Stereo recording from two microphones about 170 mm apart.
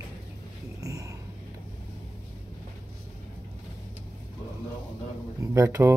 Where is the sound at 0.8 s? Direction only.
20° right (ahead or behind).